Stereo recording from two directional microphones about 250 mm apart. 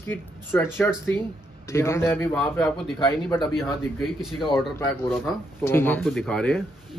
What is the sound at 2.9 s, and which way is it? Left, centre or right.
Speech, centre.